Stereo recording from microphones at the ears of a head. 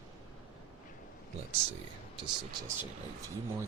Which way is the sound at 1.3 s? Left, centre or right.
Right.